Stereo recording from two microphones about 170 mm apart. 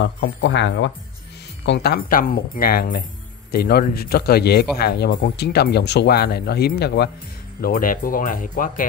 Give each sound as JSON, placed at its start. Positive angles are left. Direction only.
{"t": 0.0, "sound": "speech", "side_deg": 90}
{"t": 1.7, "sound": "a man's voice", "side_deg": 70}
{"t": 7.6, "sound": "speech", "side_deg": 55}